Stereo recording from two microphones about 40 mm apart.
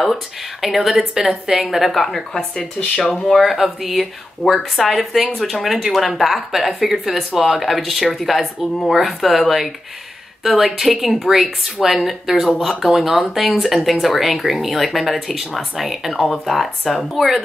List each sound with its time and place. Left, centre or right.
0.0 s speech: centre
2.5 s speech: centre
3.5 s speech: centre
4.4 s speech: centre